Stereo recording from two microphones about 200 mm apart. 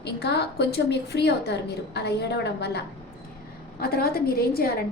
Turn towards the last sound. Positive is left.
turn(degrees=50)  # may be behind; listen again after turning